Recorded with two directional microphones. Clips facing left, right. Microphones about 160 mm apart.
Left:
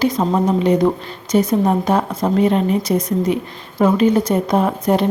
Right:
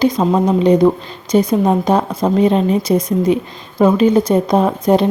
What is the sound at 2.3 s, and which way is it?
Speech, 20° right (ahead or behind).